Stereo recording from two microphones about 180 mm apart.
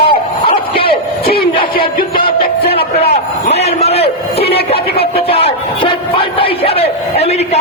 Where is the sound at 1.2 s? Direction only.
60° left (ahead or behind).